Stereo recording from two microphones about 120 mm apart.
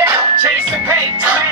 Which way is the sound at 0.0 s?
20° right (ahead or behind).